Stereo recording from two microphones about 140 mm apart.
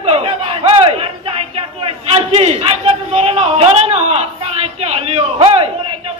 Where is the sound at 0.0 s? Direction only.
45° right (ahead or behind).